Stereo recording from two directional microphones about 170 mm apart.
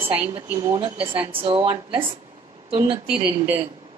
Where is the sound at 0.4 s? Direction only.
25° right (ahead or behind).